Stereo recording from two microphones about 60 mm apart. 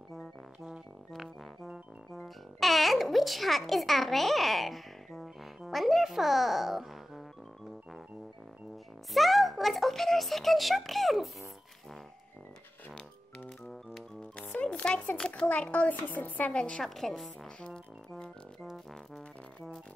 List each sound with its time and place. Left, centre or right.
0.7 s music: centre
5.7 s a child's voice: centre
9.1 s music: centre
14.3 s music: left
15.1 s a child's voice: centre
15.4 s a woman's voice: left
16.5 s a child's voice: centre
16.8 s music: centre
17.6 s music: centre